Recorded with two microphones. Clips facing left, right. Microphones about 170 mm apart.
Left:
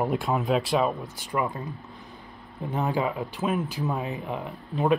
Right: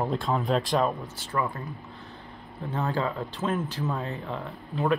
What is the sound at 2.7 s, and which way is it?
Speech, 15° left (ahead or behind).